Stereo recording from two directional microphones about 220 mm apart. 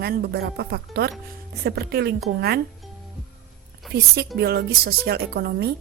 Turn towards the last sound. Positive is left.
turn(degrees=-45)  # may be behind; listen again after turning